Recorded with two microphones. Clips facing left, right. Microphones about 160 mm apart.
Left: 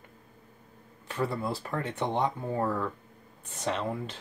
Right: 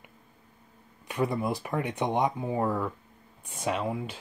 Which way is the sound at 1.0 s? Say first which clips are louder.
Right 3 dB; 15° right (ahead or behind).